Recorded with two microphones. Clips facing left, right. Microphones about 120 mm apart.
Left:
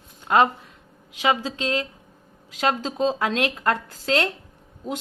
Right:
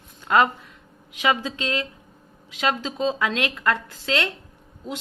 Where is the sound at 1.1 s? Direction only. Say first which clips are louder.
Left 1 dB; 30° left (ahead or behind).